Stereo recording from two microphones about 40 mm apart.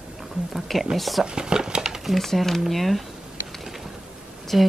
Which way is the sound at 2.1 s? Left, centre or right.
Centre.